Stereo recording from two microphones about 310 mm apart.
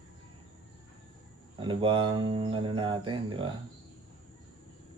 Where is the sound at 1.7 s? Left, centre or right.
Centre.